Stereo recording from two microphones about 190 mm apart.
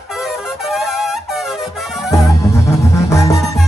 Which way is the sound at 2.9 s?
15° left (ahead or behind).